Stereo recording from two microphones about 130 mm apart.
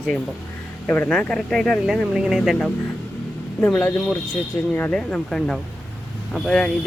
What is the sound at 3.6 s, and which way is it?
Speech, 10° left (ahead or behind).